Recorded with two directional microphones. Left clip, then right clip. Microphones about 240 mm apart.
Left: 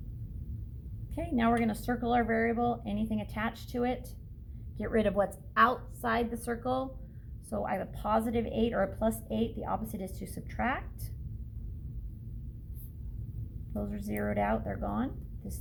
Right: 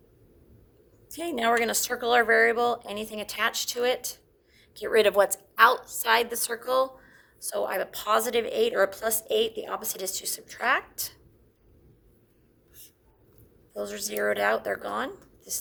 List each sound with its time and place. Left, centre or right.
1.1 s a woman's voice: right
13.8 s speech: right